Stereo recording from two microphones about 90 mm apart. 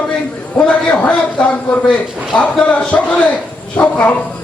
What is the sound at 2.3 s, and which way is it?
Speech, 15° left (ahead or behind).